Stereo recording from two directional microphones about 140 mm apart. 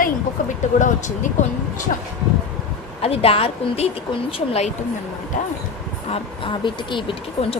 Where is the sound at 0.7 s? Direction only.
60° left (ahead or behind).